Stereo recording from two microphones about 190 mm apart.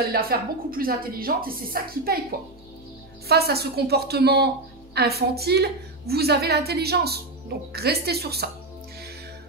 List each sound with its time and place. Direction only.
0.1 s a woman's voice: 50° right (ahead or behind)
3.3 s a woman's voice: 55° right (ahead or behind)